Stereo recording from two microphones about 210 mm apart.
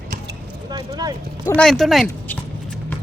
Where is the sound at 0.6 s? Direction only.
20° right (ahead or behind).